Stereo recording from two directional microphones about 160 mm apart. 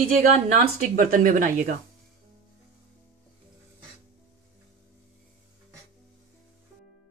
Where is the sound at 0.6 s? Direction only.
60° right (ahead or behind).